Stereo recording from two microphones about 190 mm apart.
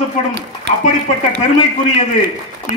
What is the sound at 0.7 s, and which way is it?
Speech, 60° right (ahead or behind).